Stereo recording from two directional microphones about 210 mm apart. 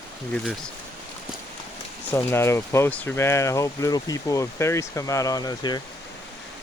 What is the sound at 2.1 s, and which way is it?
Speech, 10° left (ahead or behind).